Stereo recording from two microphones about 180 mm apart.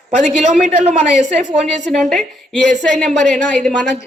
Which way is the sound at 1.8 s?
Centre (ahead or behind).